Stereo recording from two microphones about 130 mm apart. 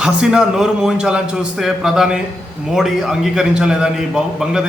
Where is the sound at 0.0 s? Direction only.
5° right (ahead or behind).